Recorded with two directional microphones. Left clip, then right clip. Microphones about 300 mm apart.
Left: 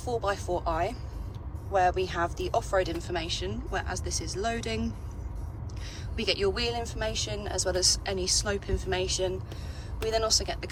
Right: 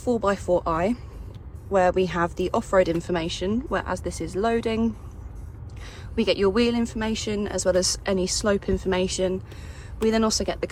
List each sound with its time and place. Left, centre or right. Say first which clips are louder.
0.0 s speech: right 6 dB; centre
6.1 s speech: right 7 dB; centre